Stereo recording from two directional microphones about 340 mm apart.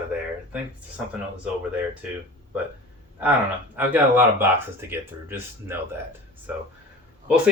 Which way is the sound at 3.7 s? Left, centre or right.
Centre.